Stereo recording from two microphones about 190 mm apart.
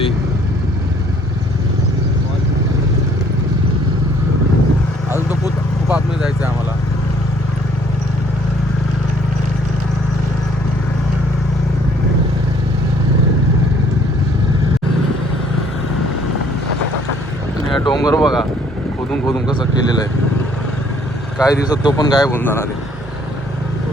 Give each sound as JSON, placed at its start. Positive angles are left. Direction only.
{"t": 5.9, "sound": "vehicle", "side_deg": -10}
{"t": 17.8, "sound": "a sound", "side_deg": 20}
{"t": 18.2, "sound": "vehicle", "side_deg": 0}
{"t": 19.3, "sound": "vehicle", "side_deg": 20}
{"t": 21.4, "sound": "speech", "side_deg": 20}